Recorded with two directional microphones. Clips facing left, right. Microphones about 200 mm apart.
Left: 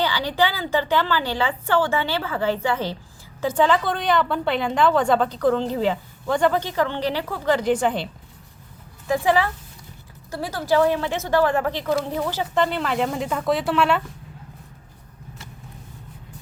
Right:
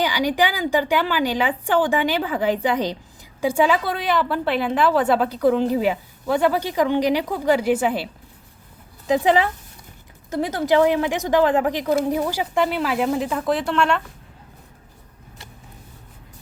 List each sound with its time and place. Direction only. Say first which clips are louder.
0.0 s a woman's voice: right 2 dB; 15° right (ahead or behind)
9.0 s a woman's voice: right 2 dB; 20° right (ahead or behind); by 14.0 s 5° left (ahead or behind)